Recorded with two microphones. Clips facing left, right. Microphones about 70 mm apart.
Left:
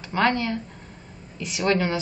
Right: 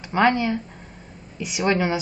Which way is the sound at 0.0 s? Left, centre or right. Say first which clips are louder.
Right 3 dB; centre.